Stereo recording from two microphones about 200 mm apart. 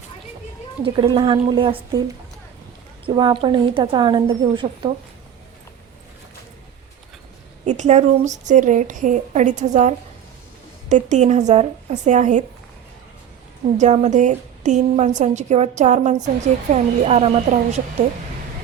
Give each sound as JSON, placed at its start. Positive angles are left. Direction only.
{"t": 0.9, "sound": "speech", "side_deg": -25}
{"t": 3.1, "sound": "speech", "side_deg": -25}
{"t": 7.6, "sound": "a woman's voice", "side_deg": -35}
{"t": 13.7, "sound": "a woman's voice", "side_deg": -35}